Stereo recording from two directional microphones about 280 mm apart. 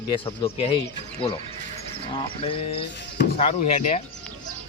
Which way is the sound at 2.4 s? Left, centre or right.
Centre.